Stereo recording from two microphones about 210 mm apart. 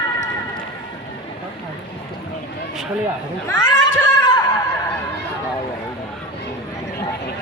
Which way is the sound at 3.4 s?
15° left (ahead or behind).